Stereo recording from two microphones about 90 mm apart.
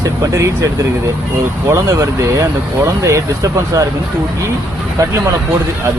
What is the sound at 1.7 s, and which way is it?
Speech, 35° right (ahead or behind).